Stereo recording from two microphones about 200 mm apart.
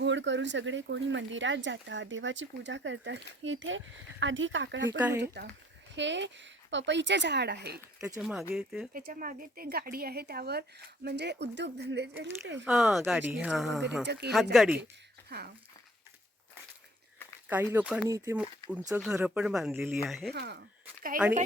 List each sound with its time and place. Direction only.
0.0 s speech: 65° right (ahead or behind)
4.9 s speech: 10° right (ahead or behind)
5.1 s a woman's voice: 55° right (ahead or behind)
8.0 s speech: 5° right (ahead or behind)
8.9 s a woman's voice: 45° right (ahead or behind); by 12.6 s 60° right (ahead or behind)
12.6 s speech: centre (ahead or behind)
14.1 s a woman's voice: 55° right (ahead or behind)
14.5 s speech: 5° right (ahead or behind)
17.5 s speech: 10° right (ahead or behind)
20.3 s speech: 55° right (ahead or behind)